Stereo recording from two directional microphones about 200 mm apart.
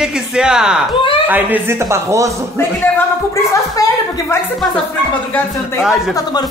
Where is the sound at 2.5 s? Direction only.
15° left (ahead or behind).